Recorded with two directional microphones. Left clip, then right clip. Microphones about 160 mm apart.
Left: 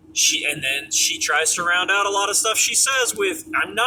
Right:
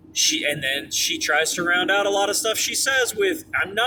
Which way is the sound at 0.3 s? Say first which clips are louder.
Left 1 dB; 65° right (ahead or behind).